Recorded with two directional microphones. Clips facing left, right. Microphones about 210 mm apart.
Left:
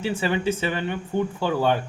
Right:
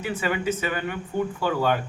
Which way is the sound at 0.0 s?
30° left (ahead or behind).